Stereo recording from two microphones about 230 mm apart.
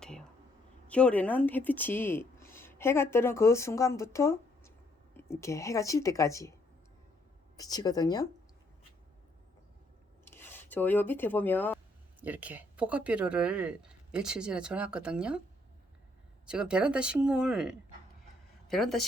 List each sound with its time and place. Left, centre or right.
0.0 s a sound: centre
0.9 s speech: centre
7.5 s speech: centre
10.2 s speech: centre
12.2 s speech: centre
16.5 s speech: centre